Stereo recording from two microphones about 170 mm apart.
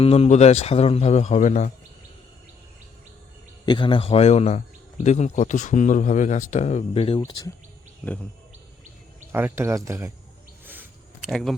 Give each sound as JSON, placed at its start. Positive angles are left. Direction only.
{"t": 0.0, "sound": "speech", "side_deg": 35}
{"t": 3.7, "sound": "speech", "side_deg": 30}
{"t": 7.3, "sound": "speech", "side_deg": 20}
{"t": 9.3, "sound": "speech", "side_deg": -15}
{"t": 11.3, "sound": "speech", "side_deg": 0}